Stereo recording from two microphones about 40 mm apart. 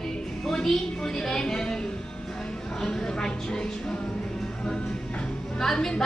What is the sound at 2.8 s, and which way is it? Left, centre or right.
Speech, centre.